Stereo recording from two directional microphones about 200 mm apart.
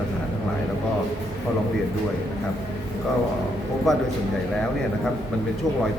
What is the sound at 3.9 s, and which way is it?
Speech, centre (ahead or behind).